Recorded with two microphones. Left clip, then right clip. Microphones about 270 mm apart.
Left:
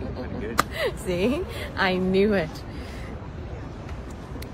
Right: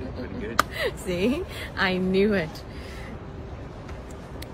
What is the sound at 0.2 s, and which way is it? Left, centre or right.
Chop, centre.